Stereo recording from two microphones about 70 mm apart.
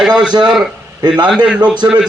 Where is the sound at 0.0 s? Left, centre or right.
Centre.